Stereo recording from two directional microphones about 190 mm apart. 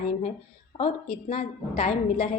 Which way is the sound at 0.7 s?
30° left (ahead or behind).